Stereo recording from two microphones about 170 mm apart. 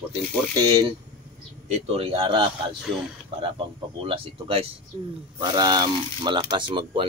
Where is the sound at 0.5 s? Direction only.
20° right (ahead or behind).